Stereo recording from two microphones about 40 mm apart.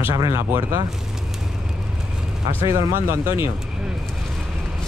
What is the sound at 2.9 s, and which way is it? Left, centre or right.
Speech, right.